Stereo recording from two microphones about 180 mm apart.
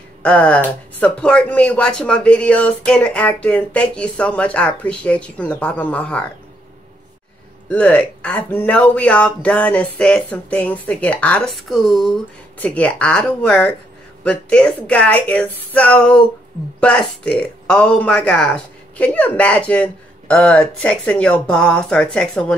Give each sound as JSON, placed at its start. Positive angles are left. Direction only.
{"t": 0.2, "sound": "speech", "side_deg": 5}
{"t": 7.7, "sound": "speech", "side_deg": 10}